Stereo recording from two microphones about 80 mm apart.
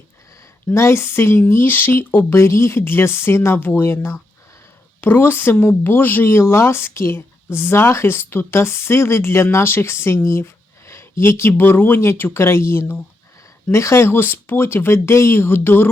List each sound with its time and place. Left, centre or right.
0.7 s speech: left